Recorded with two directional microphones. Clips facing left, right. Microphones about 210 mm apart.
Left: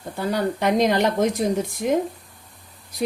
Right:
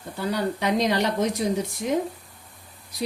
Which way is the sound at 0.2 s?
50° left (ahead or behind).